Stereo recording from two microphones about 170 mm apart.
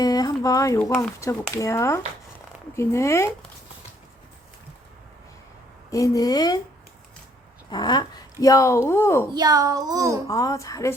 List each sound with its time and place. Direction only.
0.0 s a sound: 20° left (ahead or behind)
1.2 s speech: 15° left (ahead or behind)
5.9 s speech: 20° left (ahead or behind)
7.7 s speech: 25° left (ahead or behind)
9.3 s a child's voice: 25° right (ahead or behind)
10.2 s speech: 20° left (ahead or behind)